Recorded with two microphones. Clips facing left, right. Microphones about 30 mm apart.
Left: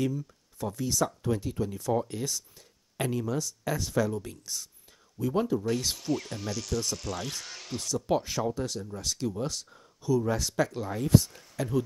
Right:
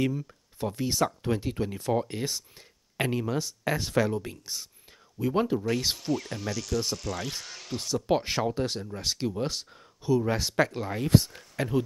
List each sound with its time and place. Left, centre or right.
0.0 s speech: right
4.1 s speech: right
6.1 s speech: centre
7.4 s a sound: centre
8.2 s speech: right
8.5 s speech: right